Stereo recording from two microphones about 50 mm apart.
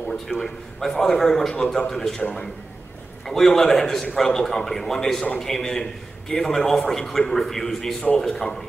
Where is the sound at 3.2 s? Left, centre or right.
Centre.